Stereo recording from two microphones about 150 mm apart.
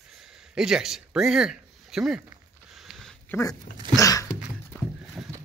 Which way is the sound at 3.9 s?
25° left (ahead or behind).